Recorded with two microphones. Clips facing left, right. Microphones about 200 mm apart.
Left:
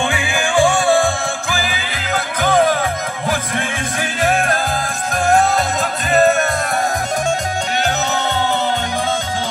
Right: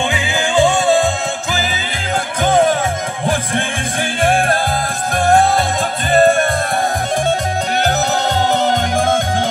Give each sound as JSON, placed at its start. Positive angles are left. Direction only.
{"t": 0.1, "sound": "music", "side_deg": -20}
{"t": 7.8, "sound": "music", "side_deg": -40}